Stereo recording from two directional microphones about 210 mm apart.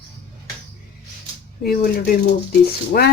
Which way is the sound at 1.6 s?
45° left (ahead or behind).